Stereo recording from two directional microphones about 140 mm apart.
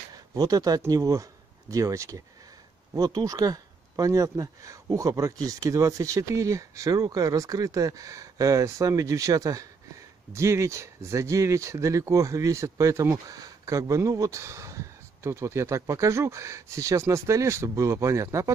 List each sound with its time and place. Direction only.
0.1 s speech: 25° right (ahead or behind)